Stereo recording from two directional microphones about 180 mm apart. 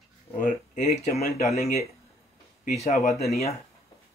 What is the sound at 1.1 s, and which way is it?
Speech, centre (ahead or behind).